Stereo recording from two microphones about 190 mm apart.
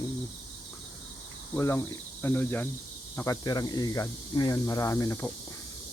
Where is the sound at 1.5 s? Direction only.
15° left (ahead or behind).